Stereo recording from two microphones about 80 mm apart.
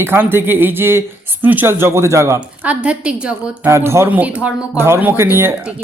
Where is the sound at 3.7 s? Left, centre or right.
Right.